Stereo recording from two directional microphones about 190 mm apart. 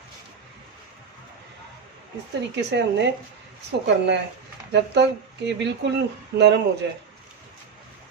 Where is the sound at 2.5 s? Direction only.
65° right (ahead or behind).